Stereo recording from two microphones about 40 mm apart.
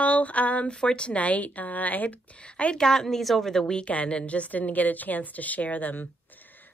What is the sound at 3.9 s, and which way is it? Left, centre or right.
A woman's voice, left.